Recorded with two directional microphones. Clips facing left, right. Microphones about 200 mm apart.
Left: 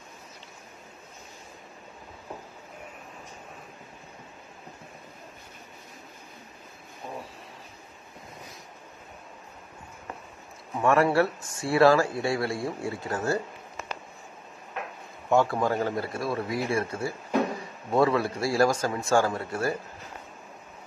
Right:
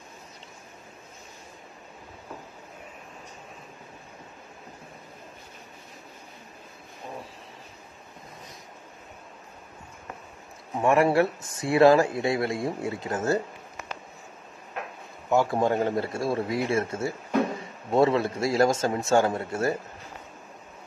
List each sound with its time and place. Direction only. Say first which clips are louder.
10.8 s speech: right 1 dB; 15° right (ahead or behind)
15.4 s speech: right 2 dB; 25° right (ahead or behind)